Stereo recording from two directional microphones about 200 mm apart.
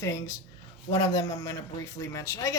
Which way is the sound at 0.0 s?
15° left (ahead or behind).